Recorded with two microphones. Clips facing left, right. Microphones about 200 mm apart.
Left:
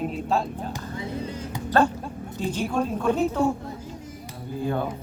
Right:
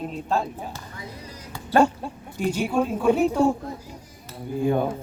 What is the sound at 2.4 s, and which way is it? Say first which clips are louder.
A woman's voice: right 3 dB; 10° right (ahead or behind).